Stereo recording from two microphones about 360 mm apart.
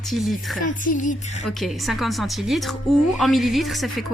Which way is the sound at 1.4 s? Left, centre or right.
Centre.